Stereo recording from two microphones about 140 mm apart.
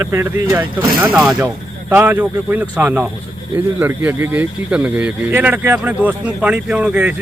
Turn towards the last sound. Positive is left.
turn(degrees=-10)  # may be behind; listen again after turning